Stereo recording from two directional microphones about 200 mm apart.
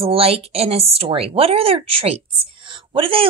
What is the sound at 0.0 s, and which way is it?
A woman's voice, 30° right (ahead or behind).